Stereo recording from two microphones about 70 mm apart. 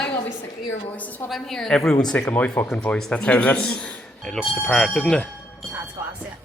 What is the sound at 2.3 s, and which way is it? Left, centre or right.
A man's voice, centre.